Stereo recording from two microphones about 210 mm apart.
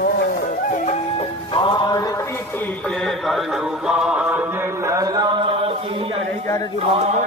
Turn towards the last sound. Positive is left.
turn(degrees=-25)  # may be behind; listen again after turning